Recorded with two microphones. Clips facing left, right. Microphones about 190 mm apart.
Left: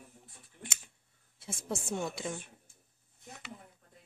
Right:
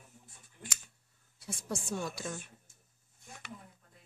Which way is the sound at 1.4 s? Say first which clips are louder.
Left 1 dB; 25° left (ahead or behind).